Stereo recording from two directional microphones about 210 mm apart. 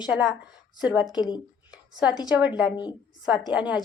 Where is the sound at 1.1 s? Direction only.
20° left (ahead or behind).